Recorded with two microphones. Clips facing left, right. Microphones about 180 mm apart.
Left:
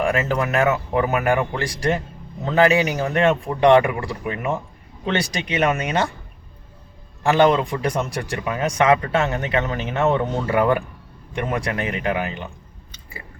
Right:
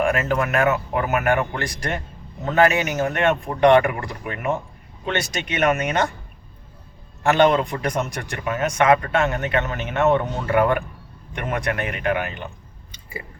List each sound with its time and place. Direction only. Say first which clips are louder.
0.0 s speech: even; 35° left (ahead or behind)
7.2 s speech: left 1 dB; 30° left (ahead or behind)